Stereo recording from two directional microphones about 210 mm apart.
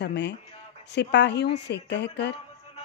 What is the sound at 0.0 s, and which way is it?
A woman's voice, 55° left (ahead or behind).